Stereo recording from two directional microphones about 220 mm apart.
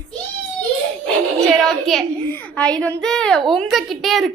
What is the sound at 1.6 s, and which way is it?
A child's voice, centre (ahead or behind).